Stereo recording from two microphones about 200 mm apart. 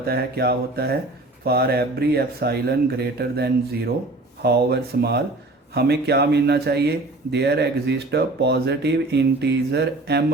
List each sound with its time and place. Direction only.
0.0 s speech: 50° right (ahead or behind)